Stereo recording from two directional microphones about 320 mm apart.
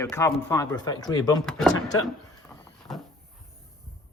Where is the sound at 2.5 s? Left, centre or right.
Centre.